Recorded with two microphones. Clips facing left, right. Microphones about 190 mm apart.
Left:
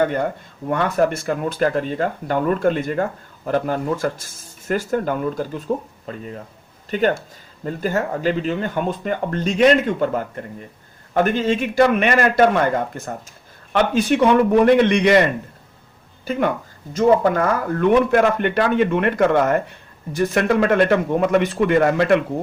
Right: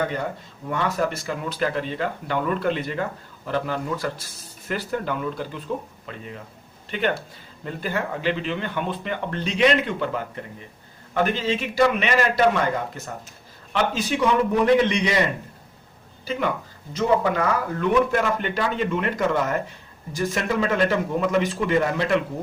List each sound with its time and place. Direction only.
0.7 s speech: 55° left (ahead or behind)
16.3 s speech: 50° left (ahead or behind)